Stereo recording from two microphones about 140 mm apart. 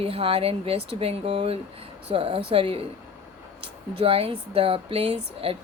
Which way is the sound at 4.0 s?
45° right (ahead or behind).